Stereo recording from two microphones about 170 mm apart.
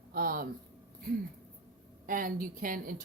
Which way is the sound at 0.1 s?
55° right (ahead or behind).